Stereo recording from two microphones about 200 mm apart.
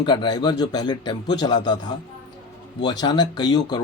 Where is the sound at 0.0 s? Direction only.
20° left (ahead or behind).